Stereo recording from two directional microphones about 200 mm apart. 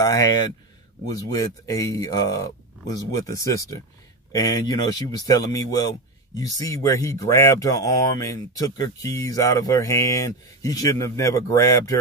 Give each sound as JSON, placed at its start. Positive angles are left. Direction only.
{"t": 0.0, "sound": "speech", "side_deg": 20}